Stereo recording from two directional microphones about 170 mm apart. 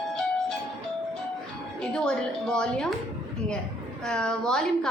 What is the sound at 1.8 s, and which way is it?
A woman's voice, 5° left (ahead or behind).